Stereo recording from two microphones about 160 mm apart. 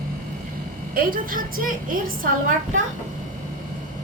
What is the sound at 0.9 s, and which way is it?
Speech, 60° right (ahead or behind).